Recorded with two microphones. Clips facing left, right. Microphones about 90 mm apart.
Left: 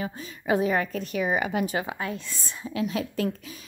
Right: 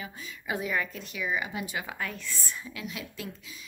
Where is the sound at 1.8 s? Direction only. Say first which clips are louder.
Left 5 dB; 25° left (ahead or behind); by 3.6 s 50° left (ahead or behind).